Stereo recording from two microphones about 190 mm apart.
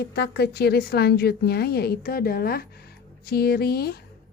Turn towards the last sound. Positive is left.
turn(degrees=55)  # may be behind; listen again after turning